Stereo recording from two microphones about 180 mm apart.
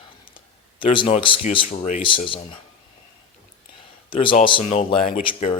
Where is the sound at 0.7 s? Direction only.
30° left (ahead or behind).